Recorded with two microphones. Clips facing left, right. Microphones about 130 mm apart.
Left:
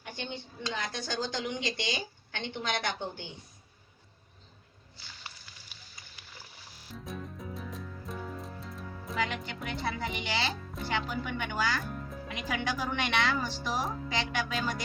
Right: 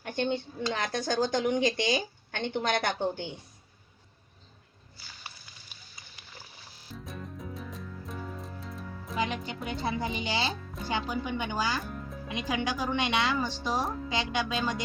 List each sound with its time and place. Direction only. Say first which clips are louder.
0.0 s speech: right 10 dB; 50° right (ahead or behind)
6.9 s music: even; centre (ahead or behind)
9.1 s a woman's voice: right 2 dB; 20° right (ahead or behind)
10.5 s music: right 1 dB; centre (ahead or behind)
10.8 s a woman's voice: right 2 dB; 15° right (ahead or behind)
11.8 s music: right 1 dB; centre (ahead or behind)
12.3 s a woman's voice: right 3 dB; 20° right (ahead or behind)